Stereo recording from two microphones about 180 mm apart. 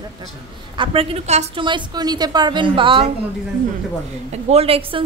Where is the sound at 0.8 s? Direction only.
35° right (ahead or behind).